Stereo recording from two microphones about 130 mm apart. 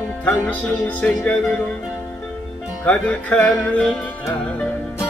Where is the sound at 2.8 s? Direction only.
10° left (ahead or behind).